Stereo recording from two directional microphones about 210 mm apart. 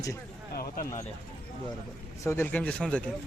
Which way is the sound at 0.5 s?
45° left (ahead or behind).